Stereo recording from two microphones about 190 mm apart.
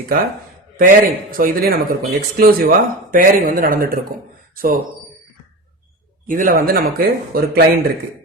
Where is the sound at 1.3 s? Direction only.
50° right (ahead or behind).